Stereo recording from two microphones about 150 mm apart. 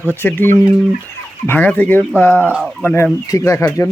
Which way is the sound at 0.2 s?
15° left (ahead or behind).